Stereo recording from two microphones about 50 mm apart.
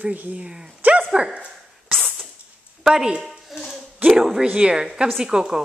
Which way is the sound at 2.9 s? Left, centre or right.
Centre.